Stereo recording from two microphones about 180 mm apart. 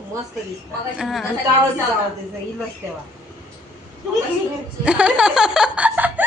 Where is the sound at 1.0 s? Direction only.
Centre (ahead or behind).